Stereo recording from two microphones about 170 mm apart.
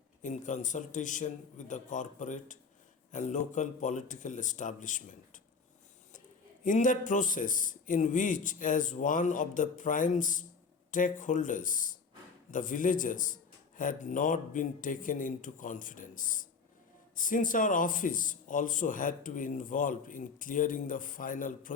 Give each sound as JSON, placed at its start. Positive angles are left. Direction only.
{"t": 0.2, "sound": "speech", "side_deg": 45}
{"t": 6.7, "sound": "speech", "side_deg": 50}